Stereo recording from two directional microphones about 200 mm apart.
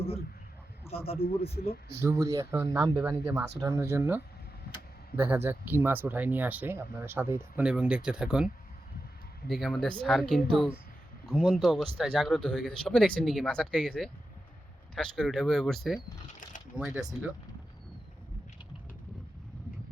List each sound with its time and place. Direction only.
0.9 s speech: 30° left (ahead or behind)
1.9 s speech: 15° right (ahead or behind)
9.5 s speech: centre (ahead or behind)
16.4 s a sound: 40° left (ahead or behind)
16.7 s speech: 5° right (ahead or behind)